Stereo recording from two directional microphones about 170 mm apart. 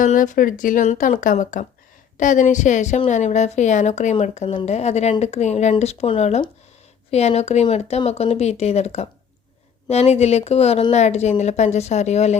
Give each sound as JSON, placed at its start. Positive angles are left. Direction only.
{"t": 0.0, "sound": "a woman's voice", "side_deg": 50}